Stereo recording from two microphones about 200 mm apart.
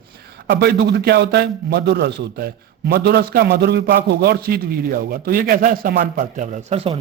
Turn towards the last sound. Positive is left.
turn(degrees=-35)  # may be behind; listen again after turning